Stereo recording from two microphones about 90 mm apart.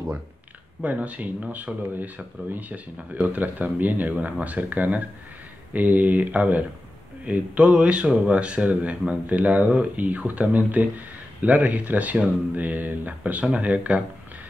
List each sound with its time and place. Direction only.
0.8 s speech: 15° right (ahead or behind)